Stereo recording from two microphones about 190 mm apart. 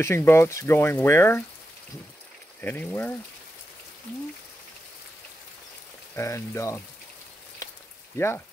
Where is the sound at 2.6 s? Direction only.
10° left (ahead or behind).